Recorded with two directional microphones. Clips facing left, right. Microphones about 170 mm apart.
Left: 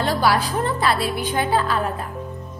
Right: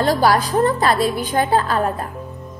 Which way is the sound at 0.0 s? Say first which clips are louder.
Right 4 dB; 40° right (ahead or behind).